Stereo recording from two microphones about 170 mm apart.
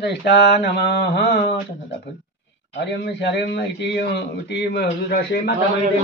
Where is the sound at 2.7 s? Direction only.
90° left; by 5.5 s 65° left (ahead or behind).